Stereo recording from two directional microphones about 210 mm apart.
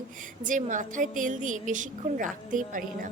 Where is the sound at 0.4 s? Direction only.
40° right (ahead or behind).